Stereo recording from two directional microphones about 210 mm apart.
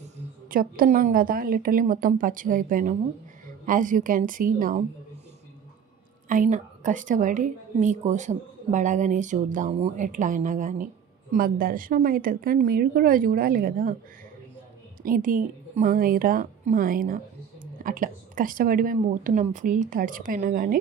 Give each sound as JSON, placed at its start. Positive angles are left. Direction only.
{"t": 0.4, "sound": "a woman's voice", "side_deg": -40}
{"t": 6.2, "sound": "a woman's voice", "side_deg": -40}
{"t": 15.0, "sound": "a woman's voice", "side_deg": -40}